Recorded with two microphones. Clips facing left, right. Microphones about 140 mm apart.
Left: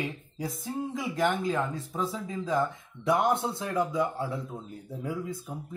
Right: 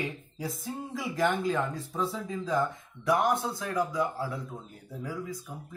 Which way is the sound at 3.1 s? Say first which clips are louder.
Left 1 dB; 25° left (ahead or behind).